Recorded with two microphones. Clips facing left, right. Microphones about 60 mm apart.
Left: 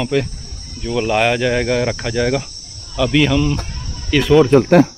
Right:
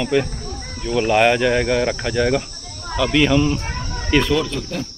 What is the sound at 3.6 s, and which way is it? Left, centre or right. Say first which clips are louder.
Chicken: right 5 dB; right.